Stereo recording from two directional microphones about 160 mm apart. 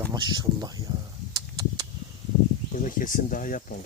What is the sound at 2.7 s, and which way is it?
Speech, 55° left (ahead or behind).